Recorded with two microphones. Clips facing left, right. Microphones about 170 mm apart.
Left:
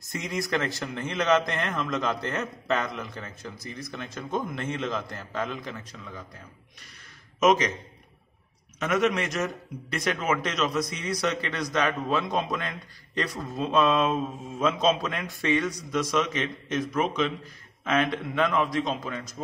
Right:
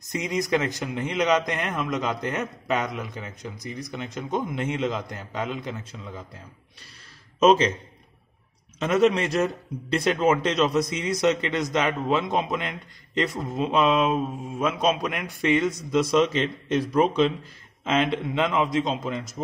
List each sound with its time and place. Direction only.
0.0 s a man's voice: 15° right (ahead or behind)
7.3 s speech: 30° right (ahead or behind)
8.7 s a man's voice: 30° right (ahead or behind)